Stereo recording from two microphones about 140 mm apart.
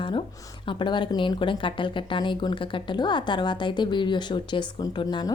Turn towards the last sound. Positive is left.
turn(degrees=35)  # may be behind; listen again after turning